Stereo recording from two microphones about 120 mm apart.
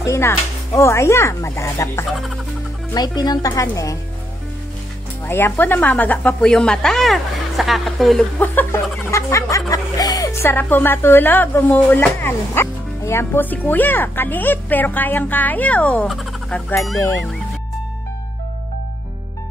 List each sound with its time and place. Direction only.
0.0 s speech: 25° left (ahead or behind)
2.1 s music: centre (ahead or behind)
2.9 s speech: 35° left (ahead or behind)
5.2 s speech: 20° left (ahead or behind); by 8.3 s centre (ahead or behind)
9.1 s speech: 25° left (ahead or behind)
10.4 s speech: 15° left (ahead or behind)
16.1 s speech: centre (ahead or behind)